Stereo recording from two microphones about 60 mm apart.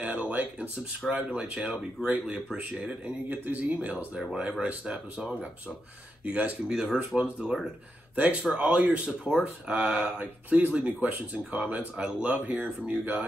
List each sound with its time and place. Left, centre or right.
0.0 s a sound: right
1.1 s speech: centre
2.1 s speech: right